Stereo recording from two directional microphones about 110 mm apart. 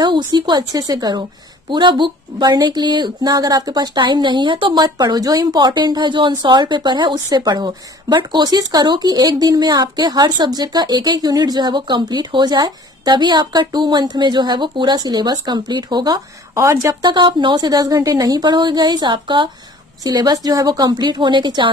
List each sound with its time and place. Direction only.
0.0 s a woman's voice: 45° right (ahead or behind)
17.0 s a woman's voice: 45° right (ahead or behind)